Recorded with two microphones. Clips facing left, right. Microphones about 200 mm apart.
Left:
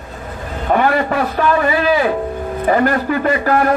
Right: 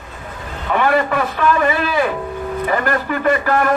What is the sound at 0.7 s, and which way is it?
A man's voice, 40° left (ahead or behind).